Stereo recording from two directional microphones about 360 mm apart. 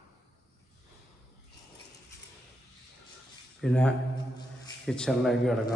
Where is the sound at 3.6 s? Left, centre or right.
Centre.